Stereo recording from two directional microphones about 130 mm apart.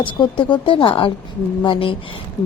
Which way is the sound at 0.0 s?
40° left (ahead or behind).